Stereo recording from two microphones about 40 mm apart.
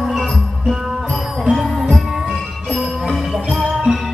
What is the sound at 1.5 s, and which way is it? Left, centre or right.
Music, centre.